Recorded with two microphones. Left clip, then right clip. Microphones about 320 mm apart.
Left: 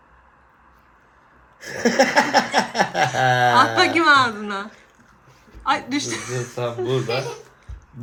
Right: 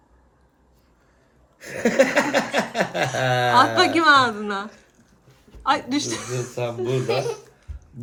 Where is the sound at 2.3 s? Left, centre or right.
Left.